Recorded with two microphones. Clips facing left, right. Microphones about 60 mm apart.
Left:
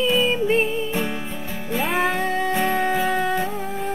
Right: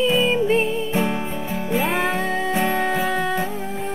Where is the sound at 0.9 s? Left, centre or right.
Centre.